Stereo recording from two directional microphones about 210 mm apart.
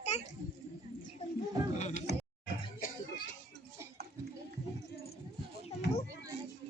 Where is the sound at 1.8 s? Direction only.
35° left (ahead or behind).